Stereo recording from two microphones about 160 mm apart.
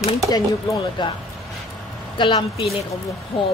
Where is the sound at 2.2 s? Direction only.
30° left (ahead or behind).